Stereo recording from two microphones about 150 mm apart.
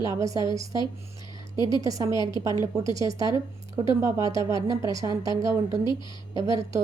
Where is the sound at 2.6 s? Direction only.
20° right (ahead or behind).